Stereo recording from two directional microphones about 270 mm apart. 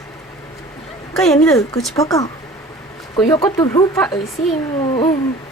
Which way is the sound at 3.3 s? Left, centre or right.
Centre.